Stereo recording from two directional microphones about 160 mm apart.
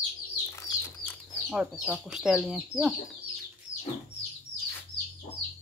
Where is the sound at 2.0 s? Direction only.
Centre (ahead or behind).